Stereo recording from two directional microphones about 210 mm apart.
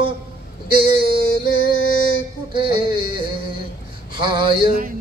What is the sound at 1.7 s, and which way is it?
Music, 75° left (ahead or behind).